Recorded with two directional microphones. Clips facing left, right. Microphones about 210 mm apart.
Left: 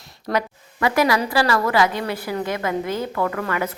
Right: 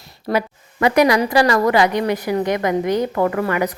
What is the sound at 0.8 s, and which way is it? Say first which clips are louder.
A woman's voice: right 4 dB; 20° right (ahead or behind).